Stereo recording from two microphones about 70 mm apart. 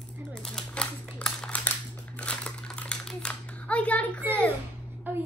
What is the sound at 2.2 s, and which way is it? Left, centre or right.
Crumpling, centre.